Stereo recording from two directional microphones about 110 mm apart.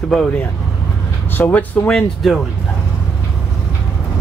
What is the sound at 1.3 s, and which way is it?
Speech, 15° left (ahead or behind).